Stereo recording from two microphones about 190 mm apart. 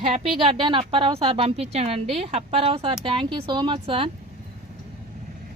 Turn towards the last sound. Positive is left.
turn(degrees=-25)  # may be behind; listen again after turning